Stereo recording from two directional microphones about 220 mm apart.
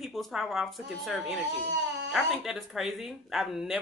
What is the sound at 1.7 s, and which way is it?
Dog, 55° right (ahead or behind).